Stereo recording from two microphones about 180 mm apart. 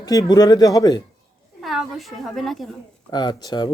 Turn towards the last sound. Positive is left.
turn(degrees=25)  # may be behind; listen again after turning